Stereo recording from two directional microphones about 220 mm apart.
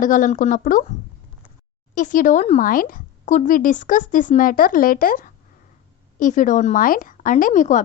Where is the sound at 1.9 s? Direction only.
35° left (ahead or behind).